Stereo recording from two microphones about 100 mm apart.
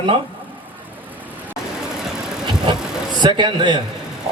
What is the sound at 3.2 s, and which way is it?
Speech, 50° right (ahead or behind).